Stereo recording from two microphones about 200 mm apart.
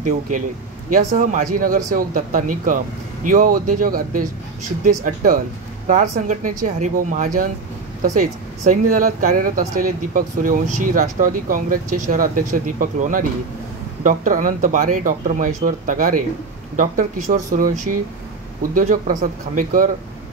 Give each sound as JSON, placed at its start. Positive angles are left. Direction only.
{"t": 0.8, "sound": "speech", "side_deg": -40}